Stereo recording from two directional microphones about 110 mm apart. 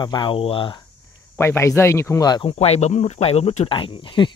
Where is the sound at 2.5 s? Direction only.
75° left (ahead or behind).